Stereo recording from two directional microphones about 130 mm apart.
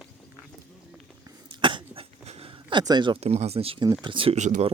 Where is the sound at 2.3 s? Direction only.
45° right (ahead or behind).